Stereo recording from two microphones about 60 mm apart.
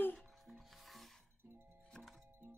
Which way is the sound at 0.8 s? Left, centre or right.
Centre.